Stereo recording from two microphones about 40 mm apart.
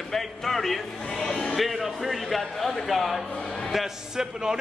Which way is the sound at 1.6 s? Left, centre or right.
Centre.